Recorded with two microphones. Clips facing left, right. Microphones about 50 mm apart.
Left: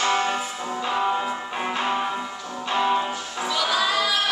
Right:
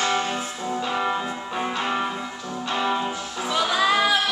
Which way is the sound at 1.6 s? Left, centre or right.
Centre.